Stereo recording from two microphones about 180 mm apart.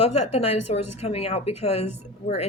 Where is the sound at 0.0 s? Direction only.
35° left (ahead or behind).